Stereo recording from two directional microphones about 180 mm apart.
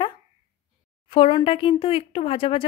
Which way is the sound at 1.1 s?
30° left (ahead or behind).